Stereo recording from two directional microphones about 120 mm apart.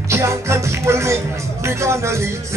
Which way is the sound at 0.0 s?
25° right (ahead or behind).